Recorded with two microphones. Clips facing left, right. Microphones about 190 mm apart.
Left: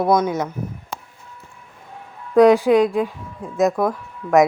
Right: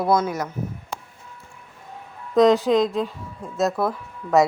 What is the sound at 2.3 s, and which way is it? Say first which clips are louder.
Speech: left 4 dB; 10° left (ahead or behind).